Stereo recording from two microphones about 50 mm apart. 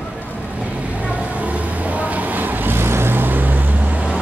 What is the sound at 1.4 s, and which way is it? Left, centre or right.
Vehicle, right.